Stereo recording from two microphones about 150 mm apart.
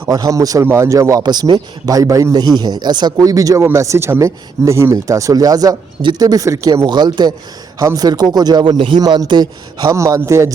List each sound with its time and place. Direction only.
0.1 s a man's voice: 25° right (ahead or behind)